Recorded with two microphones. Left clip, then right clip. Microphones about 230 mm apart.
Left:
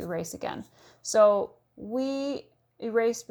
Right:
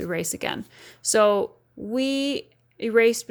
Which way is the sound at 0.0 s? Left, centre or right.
Right.